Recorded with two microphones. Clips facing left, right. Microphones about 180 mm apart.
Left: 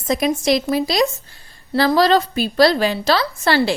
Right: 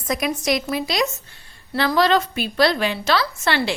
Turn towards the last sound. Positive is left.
turn(degrees=35)  # may be behind; listen again after turning